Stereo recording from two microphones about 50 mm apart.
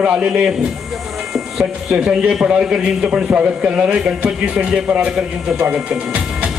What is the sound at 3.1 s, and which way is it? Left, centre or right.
A man's voice, right.